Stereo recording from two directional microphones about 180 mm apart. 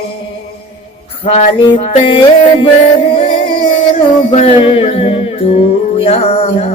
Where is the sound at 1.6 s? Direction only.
30° left (ahead or behind).